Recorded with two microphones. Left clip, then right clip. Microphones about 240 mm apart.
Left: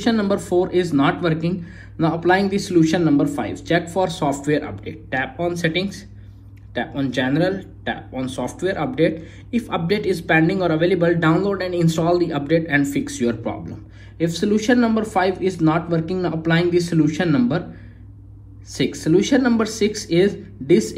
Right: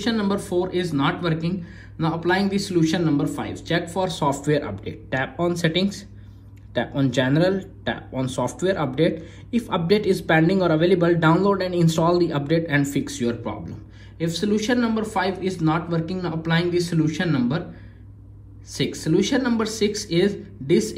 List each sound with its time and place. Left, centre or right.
0.0 s speech: centre
18.7 s speech: centre